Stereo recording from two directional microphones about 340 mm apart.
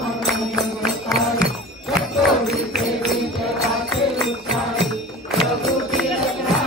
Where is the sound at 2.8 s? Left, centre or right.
Centre.